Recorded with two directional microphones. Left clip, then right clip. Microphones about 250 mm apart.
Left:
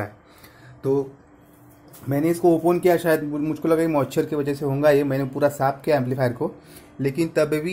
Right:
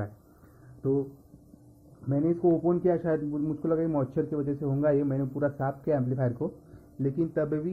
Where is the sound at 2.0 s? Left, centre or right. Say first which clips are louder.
Left 6 dB; left.